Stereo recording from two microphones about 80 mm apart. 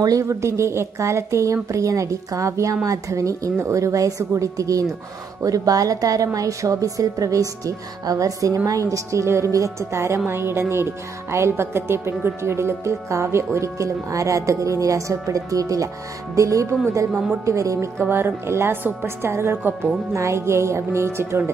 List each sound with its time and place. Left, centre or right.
0.0 s a woman's voice: right
18.0 s a woman's voice: right